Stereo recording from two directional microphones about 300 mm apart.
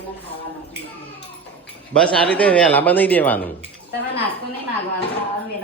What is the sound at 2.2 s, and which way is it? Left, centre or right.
Speech, centre.